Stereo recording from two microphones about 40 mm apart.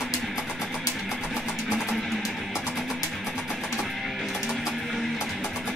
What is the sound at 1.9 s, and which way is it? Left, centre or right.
Music, centre.